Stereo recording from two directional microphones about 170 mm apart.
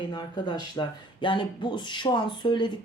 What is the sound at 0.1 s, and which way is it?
Speech, 25° left (ahead or behind).